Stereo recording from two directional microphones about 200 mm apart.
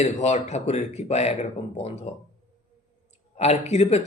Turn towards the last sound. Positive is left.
turn(degrees=35)  # may be behind; listen again after turning